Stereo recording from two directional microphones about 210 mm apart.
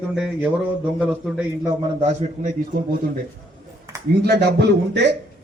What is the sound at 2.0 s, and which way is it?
Speech, 35° right (ahead or behind).